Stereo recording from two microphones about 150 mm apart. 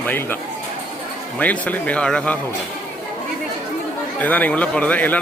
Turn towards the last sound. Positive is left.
turn(degrees=10)  # may be behind; listen again after turning